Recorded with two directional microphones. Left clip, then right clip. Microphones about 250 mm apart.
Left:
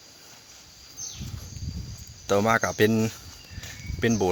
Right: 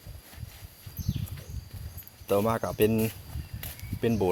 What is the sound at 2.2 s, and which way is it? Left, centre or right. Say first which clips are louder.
Speech: left 4 dB; left.